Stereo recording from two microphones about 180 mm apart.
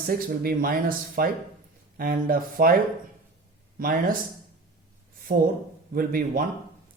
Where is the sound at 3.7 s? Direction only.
50° right (ahead or behind).